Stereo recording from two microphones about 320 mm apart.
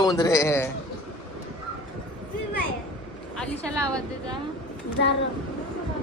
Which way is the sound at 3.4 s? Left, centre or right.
Centre.